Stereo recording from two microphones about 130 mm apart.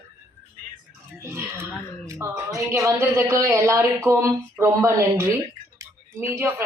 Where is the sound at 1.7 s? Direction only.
20° left (ahead or behind).